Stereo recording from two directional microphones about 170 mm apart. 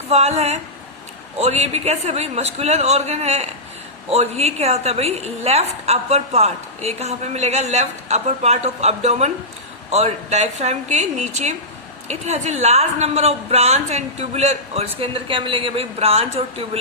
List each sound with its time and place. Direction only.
0.1 s a woman's voice: 40° right (ahead or behind)